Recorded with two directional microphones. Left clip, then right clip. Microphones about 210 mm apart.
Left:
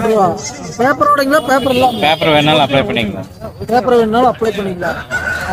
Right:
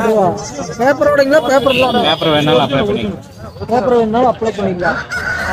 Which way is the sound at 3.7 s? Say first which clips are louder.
Left 1 dB; 15° left (ahead or behind).